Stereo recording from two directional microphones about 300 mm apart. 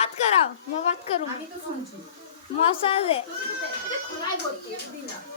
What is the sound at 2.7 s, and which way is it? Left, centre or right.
Speech, centre.